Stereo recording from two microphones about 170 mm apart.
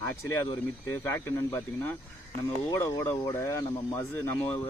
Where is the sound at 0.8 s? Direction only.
15° left (ahead or behind).